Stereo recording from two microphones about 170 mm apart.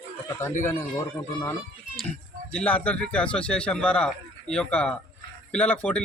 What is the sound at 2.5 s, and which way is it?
Speech, 10° left (ahead or behind).